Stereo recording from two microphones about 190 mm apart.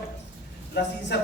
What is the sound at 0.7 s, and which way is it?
Speech, 65° left (ahead or behind).